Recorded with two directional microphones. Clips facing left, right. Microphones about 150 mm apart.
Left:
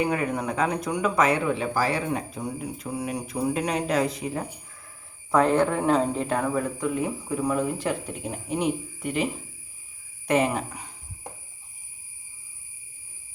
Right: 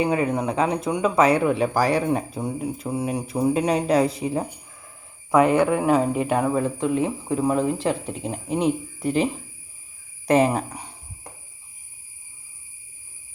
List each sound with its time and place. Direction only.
0.0 s speech: 25° right (ahead or behind)
5.3 s speech: 15° right (ahead or behind)
6.2 s speech: 20° right (ahead or behind); by 10.8 s 35° right (ahead or behind)